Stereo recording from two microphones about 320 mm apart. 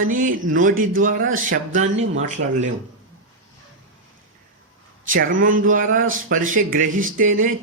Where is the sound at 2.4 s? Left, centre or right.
Right.